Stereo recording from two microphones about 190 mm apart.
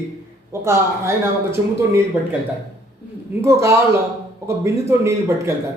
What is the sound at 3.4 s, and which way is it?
Speech, 15° right (ahead or behind).